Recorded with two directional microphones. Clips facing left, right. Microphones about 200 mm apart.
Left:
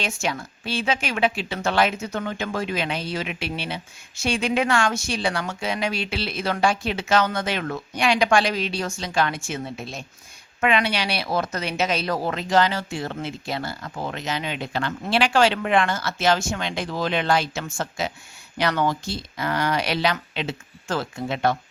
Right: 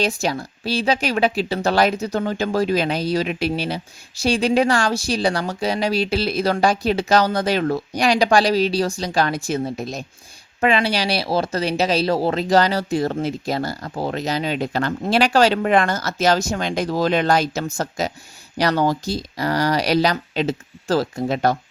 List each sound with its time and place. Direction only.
0.0 s speech: 35° right (ahead or behind)